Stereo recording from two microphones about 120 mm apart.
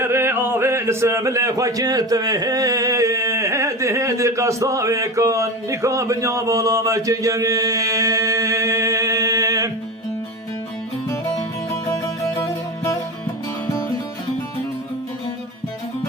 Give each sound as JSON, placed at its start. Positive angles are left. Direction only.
{"t": 0.0, "sound": "speech", "side_deg": -20}
{"t": 11.9, "sound": "music", "side_deg": 30}